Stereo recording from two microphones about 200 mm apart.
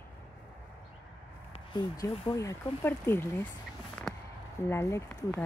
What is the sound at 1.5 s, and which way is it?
Speech, 20° left (ahead or behind).